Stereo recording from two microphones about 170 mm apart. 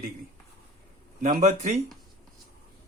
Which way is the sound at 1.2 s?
45° right (ahead or behind).